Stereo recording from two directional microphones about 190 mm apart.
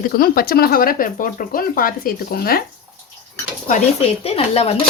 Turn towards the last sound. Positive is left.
turn(degrees=30)  # may be behind; listen again after turning